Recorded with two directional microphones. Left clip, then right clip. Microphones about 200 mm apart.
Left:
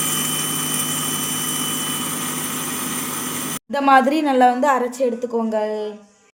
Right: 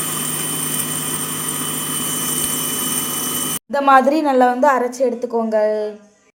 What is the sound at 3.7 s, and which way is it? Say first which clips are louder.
Speech: right 2 dB; centre (ahead or behind).